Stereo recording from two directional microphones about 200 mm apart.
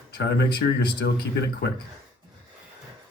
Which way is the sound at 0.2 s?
55° left (ahead or behind).